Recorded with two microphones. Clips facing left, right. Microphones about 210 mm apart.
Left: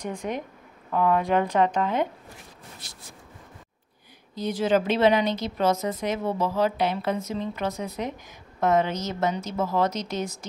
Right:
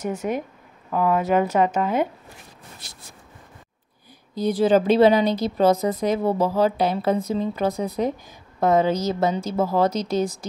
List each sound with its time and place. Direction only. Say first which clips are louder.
0.0 s speech: right 5 dB; 5° right (ahead or behind)
4.4 s a woman's voice: right 5 dB; 35° right (ahead or behind)